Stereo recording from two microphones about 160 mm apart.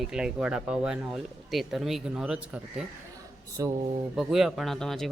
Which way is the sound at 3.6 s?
20° right (ahead or behind).